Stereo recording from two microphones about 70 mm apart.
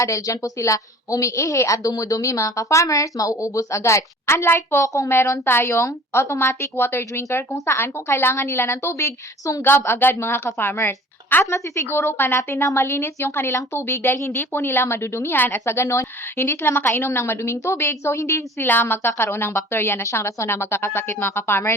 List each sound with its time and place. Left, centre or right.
0.0 s a woman's voice: left
11.4 s a woman's voice: left
18.7 s a woman's voice: left